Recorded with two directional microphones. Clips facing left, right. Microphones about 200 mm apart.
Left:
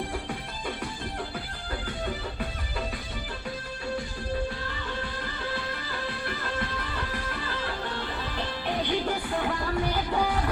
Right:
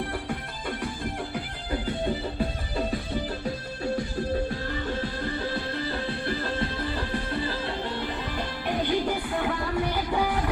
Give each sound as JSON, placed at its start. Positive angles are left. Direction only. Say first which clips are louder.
{"t": 1.7, "sound": "music", "louder": "right 6 dB", "side_deg": -30}
{"t": 4.9, "sound": "music", "louder": "right 5 dB", "side_deg": -30}